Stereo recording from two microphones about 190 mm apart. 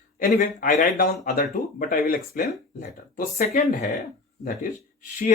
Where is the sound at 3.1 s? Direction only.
40° left (ahead or behind).